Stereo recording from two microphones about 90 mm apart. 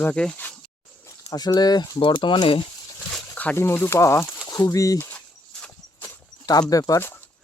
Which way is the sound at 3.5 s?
25° left (ahead or behind).